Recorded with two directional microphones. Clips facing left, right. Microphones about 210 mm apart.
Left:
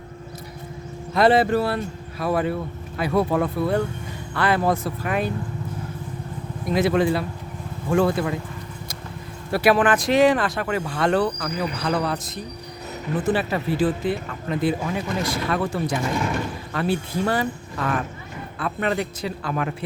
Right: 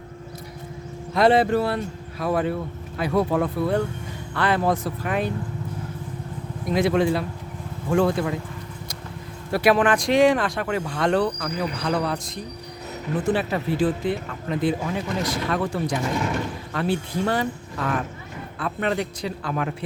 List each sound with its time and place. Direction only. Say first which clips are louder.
1.1 s speech: even; 5° left (ahead or behind)
6.7 s speech: left 1 dB; 5° left (ahead or behind)
9.5 s speech: left 1 dB; 5° left (ahead or behind)
16.0 s speech: left 1 dB; 20° right (ahead or behind)
16.7 s speech: left 1 dB; 5° left (ahead or behind)